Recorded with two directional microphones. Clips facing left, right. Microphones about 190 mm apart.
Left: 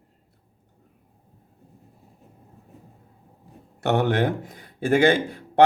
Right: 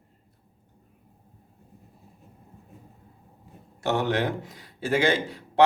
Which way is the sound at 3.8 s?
60° left (ahead or behind).